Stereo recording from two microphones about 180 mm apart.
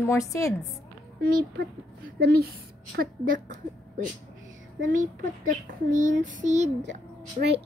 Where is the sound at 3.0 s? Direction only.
50° right (ahead or behind).